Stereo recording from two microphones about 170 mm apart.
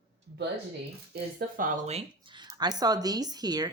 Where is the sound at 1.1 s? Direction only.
55° right (ahead or behind).